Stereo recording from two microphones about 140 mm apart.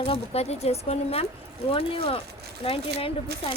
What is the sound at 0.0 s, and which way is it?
Speech, 45° left (ahead or behind).